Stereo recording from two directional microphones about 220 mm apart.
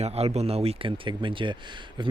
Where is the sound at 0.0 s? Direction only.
30° right (ahead or behind).